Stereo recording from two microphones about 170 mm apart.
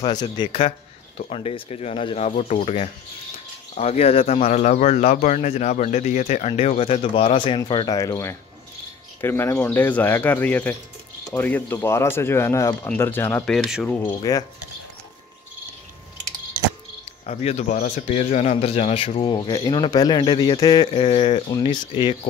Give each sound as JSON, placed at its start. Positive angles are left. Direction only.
{"t": 0.0, "sound": "speech", "side_deg": 25}
{"t": 13.8, "sound": "speech", "side_deg": 10}
{"t": 17.3, "sound": "speech", "side_deg": 40}